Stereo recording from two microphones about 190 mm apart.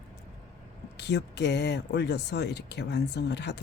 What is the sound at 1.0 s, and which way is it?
Speech, 65° left (ahead or behind).